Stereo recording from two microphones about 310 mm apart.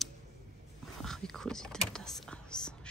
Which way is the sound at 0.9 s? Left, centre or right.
Centre.